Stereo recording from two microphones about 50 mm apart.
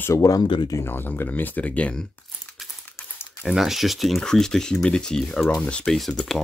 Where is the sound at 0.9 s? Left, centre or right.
Left.